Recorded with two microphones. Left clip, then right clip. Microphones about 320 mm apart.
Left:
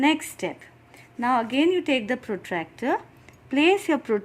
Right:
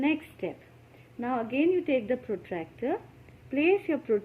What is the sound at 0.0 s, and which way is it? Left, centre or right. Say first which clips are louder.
Speech: left 7 dB; left.